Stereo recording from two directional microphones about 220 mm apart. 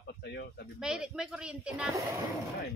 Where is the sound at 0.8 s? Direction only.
5° right (ahead or behind).